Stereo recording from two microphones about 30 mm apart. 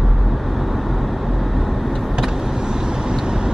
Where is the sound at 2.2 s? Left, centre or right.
Centre.